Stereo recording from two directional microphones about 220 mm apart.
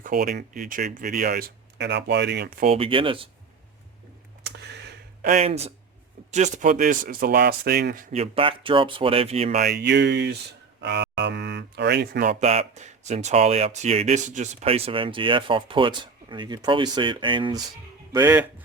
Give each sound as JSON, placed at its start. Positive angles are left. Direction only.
{"t": 0.0, "sound": "speech", "side_deg": -40}
{"t": 2.6, "sound": "speech", "side_deg": -25}
{"t": 4.4, "sound": "a sound", "side_deg": -50}
{"t": 5.3, "sound": "speech", "side_deg": -30}
{"t": 8.1, "sound": "speech", "side_deg": -25}
{"t": 9.6, "sound": "speech", "side_deg": -50}
{"t": 10.8, "sound": "a sound", "side_deg": -50}
{"t": 12.3, "sound": "speech", "side_deg": -30}
{"t": 18.1, "sound": "speech", "side_deg": -10}